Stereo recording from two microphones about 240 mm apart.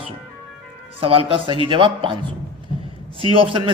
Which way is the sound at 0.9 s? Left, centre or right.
Right.